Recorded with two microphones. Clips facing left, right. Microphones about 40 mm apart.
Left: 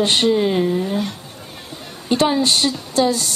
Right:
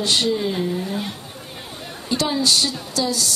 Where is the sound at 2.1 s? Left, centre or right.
Left.